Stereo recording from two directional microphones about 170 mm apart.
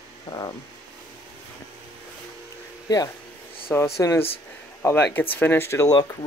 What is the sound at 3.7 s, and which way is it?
Speech, 15° left (ahead or behind).